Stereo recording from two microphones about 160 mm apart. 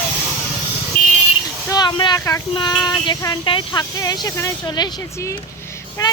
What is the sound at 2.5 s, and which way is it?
Speech, 25° left (ahead or behind).